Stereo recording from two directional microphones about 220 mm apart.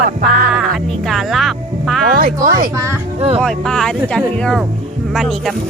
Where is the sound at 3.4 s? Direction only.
5° left (ahead or behind).